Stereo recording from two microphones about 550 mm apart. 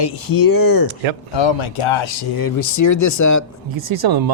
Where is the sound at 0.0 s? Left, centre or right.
Left.